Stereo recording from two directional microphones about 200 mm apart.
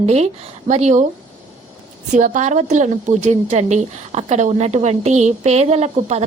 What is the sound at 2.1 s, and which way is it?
A woman's voice, 40° right (ahead or behind).